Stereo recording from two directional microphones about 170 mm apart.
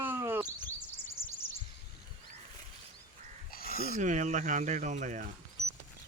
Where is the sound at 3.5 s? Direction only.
60° left (ahead or behind).